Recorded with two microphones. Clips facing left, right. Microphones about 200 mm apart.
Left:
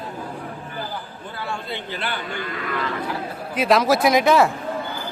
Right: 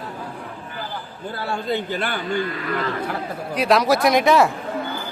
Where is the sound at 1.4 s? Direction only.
45° right (ahead or behind).